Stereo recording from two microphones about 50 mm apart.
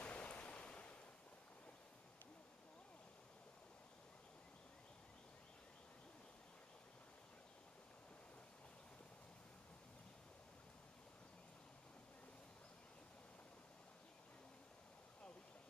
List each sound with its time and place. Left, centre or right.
0.0 s waves: left